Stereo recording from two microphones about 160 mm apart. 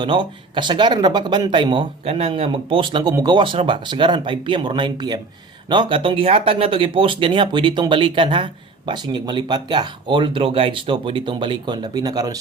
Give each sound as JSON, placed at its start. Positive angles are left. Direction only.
{"t": 0.0, "sound": "speech", "side_deg": -30}